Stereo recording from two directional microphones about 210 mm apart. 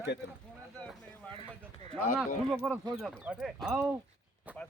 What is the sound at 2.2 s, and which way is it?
Speech, 5° right (ahead or behind).